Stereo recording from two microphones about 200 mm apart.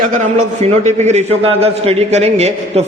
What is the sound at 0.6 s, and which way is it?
A man's voice, 35° right (ahead or behind).